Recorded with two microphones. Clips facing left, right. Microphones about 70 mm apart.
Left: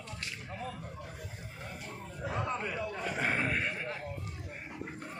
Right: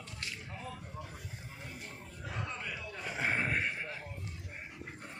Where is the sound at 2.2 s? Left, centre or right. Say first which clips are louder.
Left 6 dB; left.